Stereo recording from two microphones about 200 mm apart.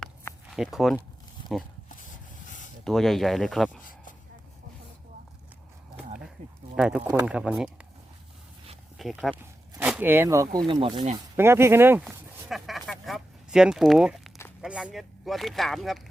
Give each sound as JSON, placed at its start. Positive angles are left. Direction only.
{"t": 0.0, "sound": "a sound", "side_deg": 0}
{"t": 1.5, "sound": "speech", "side_deg": 0}
{"t": 2.8, "sound": "speech", "side_deg": 0}
{"t": 6.7, "sound": "speech", "side_deg": -5}
{"t": 9.0, "sound": "speech", "side_deg": 0}
{"t": 10.7, "sound": "speech", "side_deg": -25}
{"t": 11.3, "sound": "a sound", "side_deg": -10}
{"t": 14.6, "sound": "speech", "side_deg": -5}